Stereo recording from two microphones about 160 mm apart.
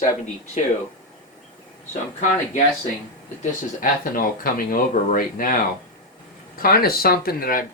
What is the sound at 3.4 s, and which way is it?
Speech, 60° left (ahead or behind).